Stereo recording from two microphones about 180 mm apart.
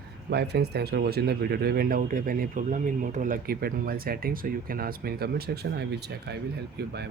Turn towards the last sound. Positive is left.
turn(degrees=-65)  # may be behind; listen again after turning